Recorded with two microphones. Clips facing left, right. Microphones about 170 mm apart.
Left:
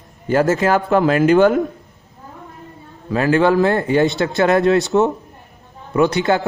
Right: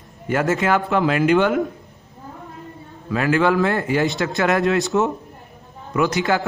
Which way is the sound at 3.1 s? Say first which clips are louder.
Left 3 dB; 35° left (ahead or behind).